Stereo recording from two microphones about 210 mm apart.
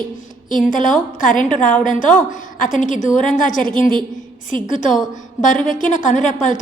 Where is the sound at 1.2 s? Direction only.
40° left (ahead or behind).